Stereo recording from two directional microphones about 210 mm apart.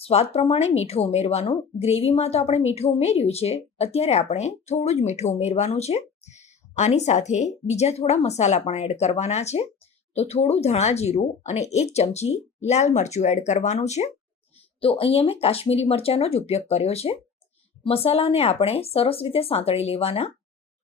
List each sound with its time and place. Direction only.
0.0 s speech: 30° left (ahead or behind)